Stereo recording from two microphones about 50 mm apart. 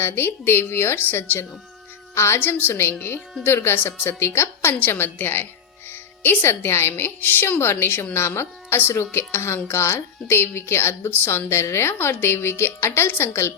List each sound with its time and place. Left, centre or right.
0.0 s a woman's voice: left
2.1 s a woman's voice: left
2.4 s a woman's voice: left
4.8 s a woman's voice: left
7.6 s a woman's voice: left
9.6 s a woman's voice: left